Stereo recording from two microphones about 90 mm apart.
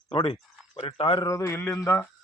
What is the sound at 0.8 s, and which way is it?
Speech, 85° left.